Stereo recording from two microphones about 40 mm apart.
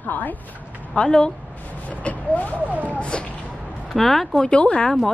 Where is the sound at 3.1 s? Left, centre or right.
Left.